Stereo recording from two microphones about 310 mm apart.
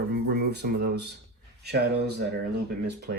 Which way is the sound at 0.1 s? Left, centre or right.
Right.